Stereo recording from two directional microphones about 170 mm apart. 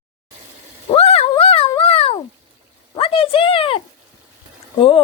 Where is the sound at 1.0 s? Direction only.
35° left (ahead or behind).